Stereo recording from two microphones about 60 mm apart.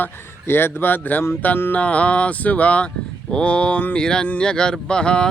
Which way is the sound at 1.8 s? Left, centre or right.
Left.